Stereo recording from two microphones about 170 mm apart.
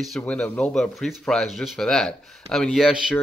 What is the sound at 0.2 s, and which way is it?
Speech, 5° left (ahead or behind).